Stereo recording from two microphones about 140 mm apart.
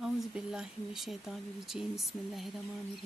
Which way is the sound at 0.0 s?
5° right (ahead or behind).